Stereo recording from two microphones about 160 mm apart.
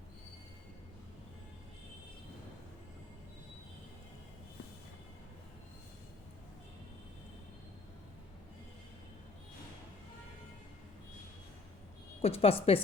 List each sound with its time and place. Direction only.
12.2 s a woman's voice: 40° left (ahead or behind)